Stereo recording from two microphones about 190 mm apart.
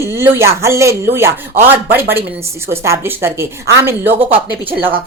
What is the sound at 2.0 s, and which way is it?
A woman's voice, 10° right (ahead or behind).